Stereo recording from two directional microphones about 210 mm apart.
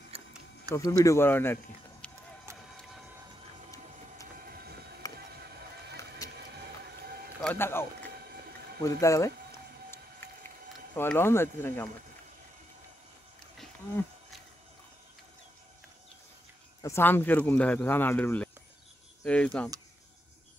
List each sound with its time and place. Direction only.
0.1 s a sound: 25° right (ahead or behind)
0.7 s speech: 15° left (ahead or behind)
4.4 s train: 45° right (ahead or behind)
5.0 s a sound: 15° left (ahead or behind)
7.4 s a sound: 10° left (ahead or behind)
8.8 s speech: 15° left (ahead or behind)
10.2 s run: 10° left (ahead or behind)
11.0 s speech: 10° left (ahead or behind)
13.6 s insect: centre (ahead or behind)
16.8 s speech: 10° left (ahead or behind)